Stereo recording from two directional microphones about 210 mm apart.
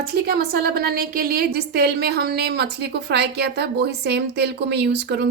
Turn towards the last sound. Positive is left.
turn(degrees=-55)  # may be behind; listen again after turning